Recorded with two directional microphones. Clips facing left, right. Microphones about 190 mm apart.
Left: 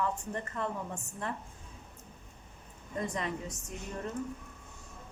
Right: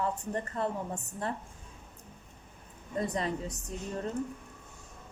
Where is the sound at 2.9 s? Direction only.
35° right (ahead or behind).